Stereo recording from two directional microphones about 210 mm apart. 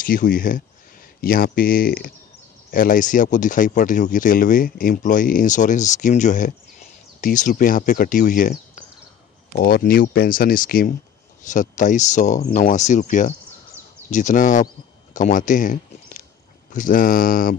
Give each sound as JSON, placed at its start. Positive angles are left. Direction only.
{"t": 0.0, "sound": "speech", "side_deg": 40}